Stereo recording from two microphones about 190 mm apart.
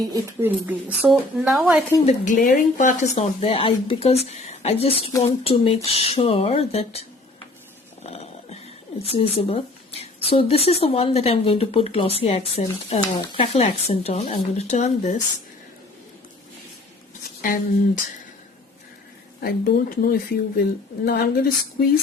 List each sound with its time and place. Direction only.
0.0 s a woman's voice: 15° right (ahead or behind)
2.0 s speech: 45° left (ahead or behind)
8.1 s a sound: 35° left (ahead or behind)
9.1 s speech: 30° left (ahead or behind)
17.4 s speech: 45° left (ahead or behind)
19.4 s speech: 55° left (ahead or behind)